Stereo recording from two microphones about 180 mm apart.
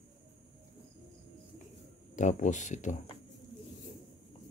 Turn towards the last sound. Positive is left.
turn(degrees=40)  # may be behind; listen again after turning